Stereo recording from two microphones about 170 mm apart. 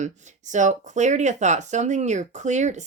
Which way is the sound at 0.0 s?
45° right (ahead or behind).